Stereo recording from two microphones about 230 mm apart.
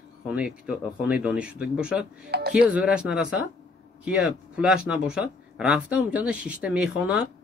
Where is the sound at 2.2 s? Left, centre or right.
Right.